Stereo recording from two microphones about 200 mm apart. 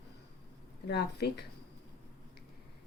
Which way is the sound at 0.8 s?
55° left (ahead or behind).